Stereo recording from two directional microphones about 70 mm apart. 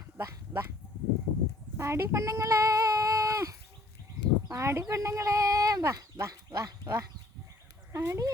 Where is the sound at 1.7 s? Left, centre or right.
Right.